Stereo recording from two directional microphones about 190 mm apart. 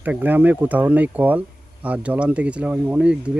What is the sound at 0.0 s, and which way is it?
Speech, 10° right (ahead or behind).